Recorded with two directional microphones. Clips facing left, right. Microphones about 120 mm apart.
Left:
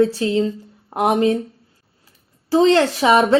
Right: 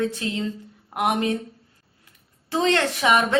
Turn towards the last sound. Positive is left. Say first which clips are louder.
# left 6 dB
turn(degrees=30)  # may be behind; listen again after turning